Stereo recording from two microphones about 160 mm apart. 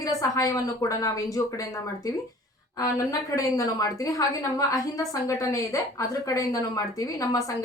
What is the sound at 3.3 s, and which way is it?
A woman's voice, 20° left (ahead or behind).